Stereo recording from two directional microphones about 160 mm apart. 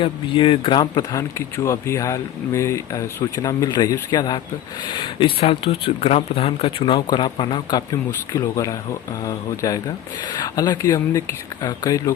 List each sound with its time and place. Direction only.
0.0 s speech: 30° left (ahead or behind)